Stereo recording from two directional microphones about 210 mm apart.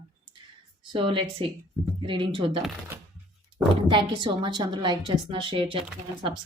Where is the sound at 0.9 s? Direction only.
25° right (ahead or behind).